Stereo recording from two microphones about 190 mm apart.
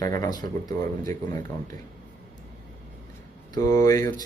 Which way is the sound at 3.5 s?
20° left (ahead or behind).